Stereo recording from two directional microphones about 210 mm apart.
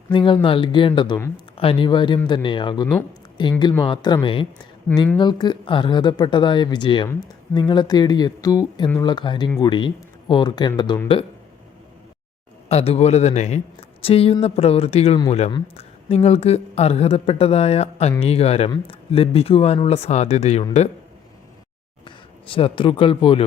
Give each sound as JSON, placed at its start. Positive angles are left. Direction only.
{"t": 0.1, "sound": "speech", "side_deg": 25}
{"t": 12.6, "sound": "a man's voice", "side_deg": 30}
{"t": 22.0, "sound": "speech", "side_deg": 25}